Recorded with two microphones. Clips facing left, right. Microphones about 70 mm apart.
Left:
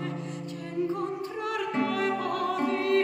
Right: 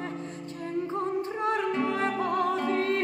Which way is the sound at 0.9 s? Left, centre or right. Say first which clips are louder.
Right 2 dB; right.